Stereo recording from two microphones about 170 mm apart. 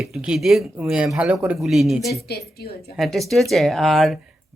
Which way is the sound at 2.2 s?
65° left (ahead or behind).